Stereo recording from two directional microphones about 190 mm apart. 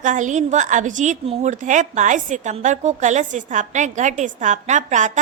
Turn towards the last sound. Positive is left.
turn(degrees=-40)  # may be behind; listen again after turning